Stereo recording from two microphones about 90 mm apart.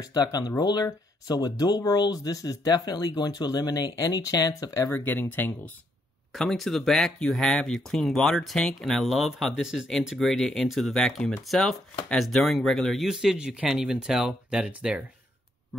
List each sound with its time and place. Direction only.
0.0 s speech: 45° left (ahead or behind)
4.9 s speech: 20° left (ahead or behind)
6.3 s speech: 5° left (ahead or behind)